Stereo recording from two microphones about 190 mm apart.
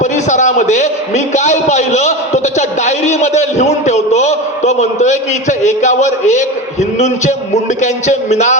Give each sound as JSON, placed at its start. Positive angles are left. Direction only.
{"t": 0.0, "sound": "a man's voice", "side_deg": 40}